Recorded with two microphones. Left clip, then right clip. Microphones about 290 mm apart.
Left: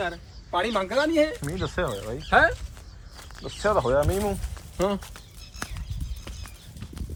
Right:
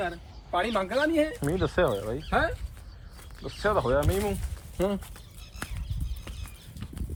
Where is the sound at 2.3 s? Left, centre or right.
Centre.